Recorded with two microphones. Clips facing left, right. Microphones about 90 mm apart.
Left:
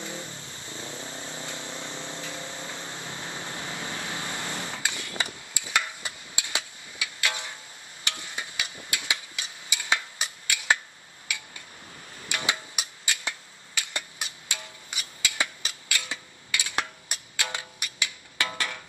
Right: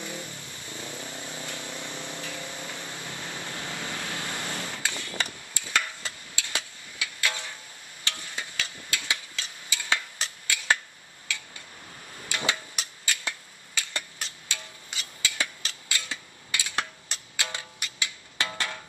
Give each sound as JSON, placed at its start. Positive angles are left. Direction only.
{"t": 0.0, "sound": "a sound", "side_deg": 20}
{"t": 2.2, "sound": "vehicle", "side_deg": 20}
{"t": 8.0, "sound": "a sound", "side_deg": 20}
{"t": 12.3, "sound": "music", "side_deg": 20}
{"t": 13.7, "sound": "tick-tock", "side_deg": 15}
{"t": 16.7, "sound": "music", "side_deg": 20}